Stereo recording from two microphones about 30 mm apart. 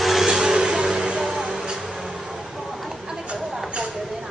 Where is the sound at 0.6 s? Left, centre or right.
Centre.